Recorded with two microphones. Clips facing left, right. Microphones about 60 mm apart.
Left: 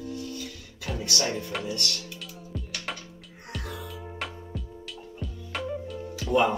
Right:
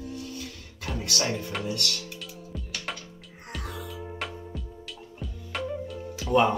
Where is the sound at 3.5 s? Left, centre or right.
Centre.